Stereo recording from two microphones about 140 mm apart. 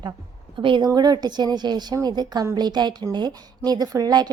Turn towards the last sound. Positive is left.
turn(degrees=-30)  # may be behind; listen again after turning